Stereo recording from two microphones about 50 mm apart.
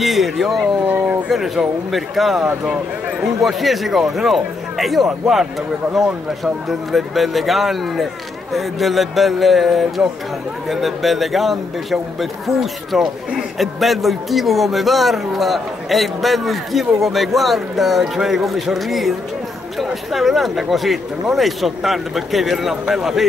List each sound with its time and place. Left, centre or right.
0.0 s a man's voice: centre
2.6 s speech: centre
3.3 s a man's voice: centre